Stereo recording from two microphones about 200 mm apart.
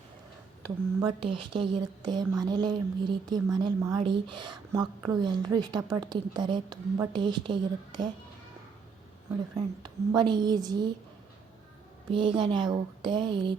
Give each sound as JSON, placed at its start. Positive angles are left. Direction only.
{"t": 1.2, "sound": "speech", "side_deg": -25}
{"t": 9.6, "sound": "speech", "side_deg": -20}
{"t": 12.1, "sound": "speech", "side_deg": -25}